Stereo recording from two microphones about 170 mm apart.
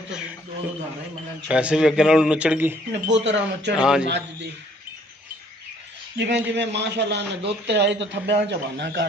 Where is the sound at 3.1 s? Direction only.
90° right.